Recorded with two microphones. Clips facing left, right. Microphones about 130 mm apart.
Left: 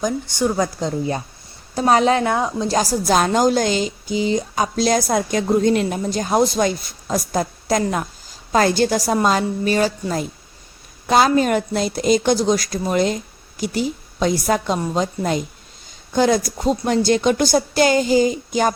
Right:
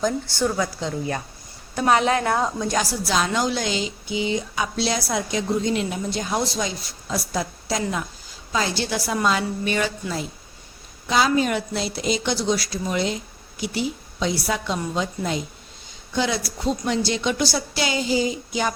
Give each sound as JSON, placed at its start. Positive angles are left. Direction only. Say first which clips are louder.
{"t": 0.0, "sound": "a woman's voice", "louder": "left 2 dB", "side_deg": 15}
{"t": 0.5, "sound": "a woman's voice", "louder": "left 4 dB", "side_deg": 40}
{"t": 2.2, "sound": "a woman's voice", "louder": "left 3 dB", "side_deg": 20}
{"t": 2.6, "sound": "a woman's voice", "louder": "left 6 dB", "side_deg": 40}